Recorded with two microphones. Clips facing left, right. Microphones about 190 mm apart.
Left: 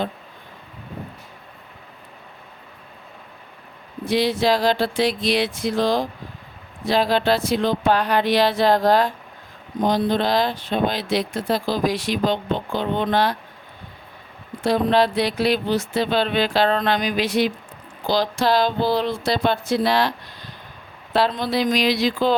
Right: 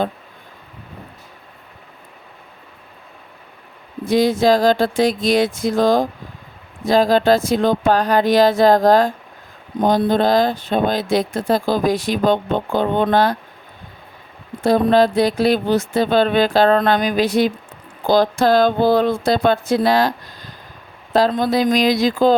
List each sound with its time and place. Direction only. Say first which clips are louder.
4.0 s speech: right 5 dB; 45° right (ahead or behind)
14.6 s speech: right 4 dB; 45° right (ahead or behind)